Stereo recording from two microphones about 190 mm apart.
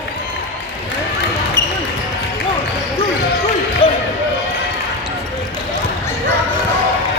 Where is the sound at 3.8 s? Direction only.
25° left (ahead or behind).